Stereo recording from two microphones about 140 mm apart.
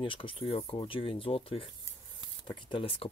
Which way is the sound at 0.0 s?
40° left (ahead or behind).